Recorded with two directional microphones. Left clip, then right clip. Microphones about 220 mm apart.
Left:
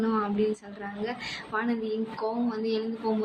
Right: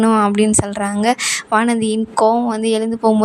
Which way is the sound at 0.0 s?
55° right (ahead or behind).